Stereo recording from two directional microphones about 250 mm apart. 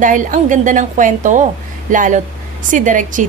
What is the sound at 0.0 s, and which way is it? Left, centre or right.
A woman's voice, right.